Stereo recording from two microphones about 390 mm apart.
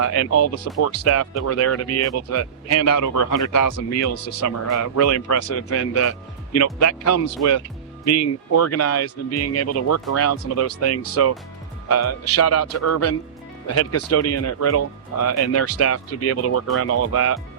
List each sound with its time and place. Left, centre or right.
0.0 s speech: left